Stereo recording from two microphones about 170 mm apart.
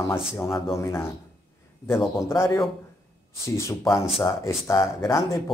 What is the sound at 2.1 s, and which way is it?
Speech, 15° left (ahead or behind).